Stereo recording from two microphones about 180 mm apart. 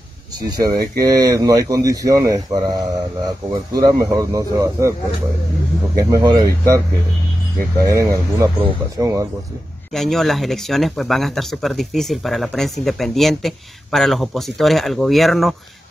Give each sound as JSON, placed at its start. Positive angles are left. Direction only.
{"t": 0.6, "sound": "speech", "side_deg": -20}
{"t": 5.9, "sound": "speech", "side_deg": -20}
{"t": 7.8, "sound": "speech", "side_deg": -20}
{"t": 9.9, "sound": "speech", "side_deg": 0}